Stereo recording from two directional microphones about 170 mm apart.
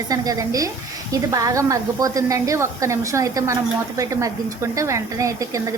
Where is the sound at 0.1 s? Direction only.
20° right (ahead or behind).